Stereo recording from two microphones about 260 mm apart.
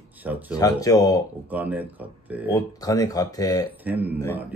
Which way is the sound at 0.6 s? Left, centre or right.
Centre.